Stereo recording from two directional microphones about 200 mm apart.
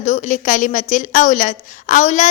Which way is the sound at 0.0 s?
35° left (ahead or behind).